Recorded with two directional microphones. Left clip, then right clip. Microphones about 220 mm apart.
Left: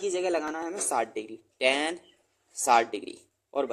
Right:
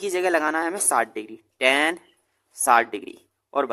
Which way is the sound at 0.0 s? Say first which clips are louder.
Right 6 dB; 25° right (ahead or behind).